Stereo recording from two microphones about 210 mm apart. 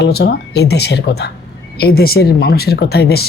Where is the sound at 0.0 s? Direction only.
50° left (ahead or behind).